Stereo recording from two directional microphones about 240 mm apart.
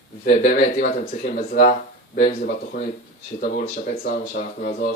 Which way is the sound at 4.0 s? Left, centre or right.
Left.